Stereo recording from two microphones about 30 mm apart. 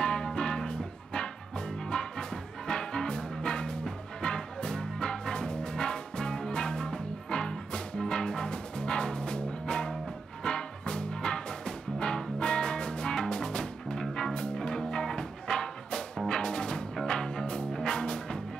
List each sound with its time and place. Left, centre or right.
0.0 s music: left
14.4 s music: left